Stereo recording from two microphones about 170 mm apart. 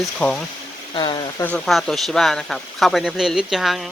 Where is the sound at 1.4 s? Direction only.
5° left (ahead or behind).